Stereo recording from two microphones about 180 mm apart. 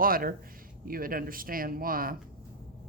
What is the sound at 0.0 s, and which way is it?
A woman's voice, 55° right (ahead or behind).